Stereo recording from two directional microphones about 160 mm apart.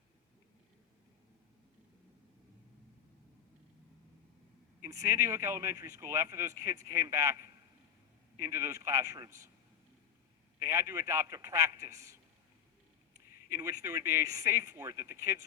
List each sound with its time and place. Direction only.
4.8 s speech: 20° right (ahead or behind)
10.6 s speech: 15° right (ahead or behind)